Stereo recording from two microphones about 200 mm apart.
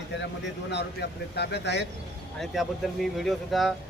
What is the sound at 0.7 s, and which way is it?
Speech, 55° left (ahead or behind).